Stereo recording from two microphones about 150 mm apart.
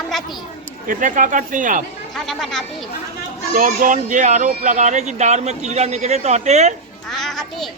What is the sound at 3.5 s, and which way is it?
Speech, 65° right (ahead or behind).